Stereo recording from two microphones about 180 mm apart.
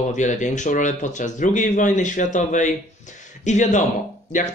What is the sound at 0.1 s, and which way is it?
Speech, 45° left (ahead or behind).